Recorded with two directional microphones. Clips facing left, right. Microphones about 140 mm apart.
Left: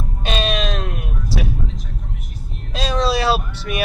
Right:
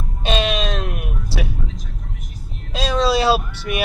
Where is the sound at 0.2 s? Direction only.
20° right (ahead or behind).